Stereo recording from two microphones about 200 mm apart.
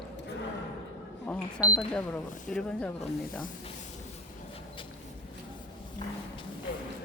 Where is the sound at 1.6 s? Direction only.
5° left (ahead or behind).